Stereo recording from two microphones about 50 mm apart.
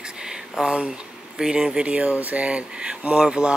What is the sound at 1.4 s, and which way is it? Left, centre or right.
Speech, centre.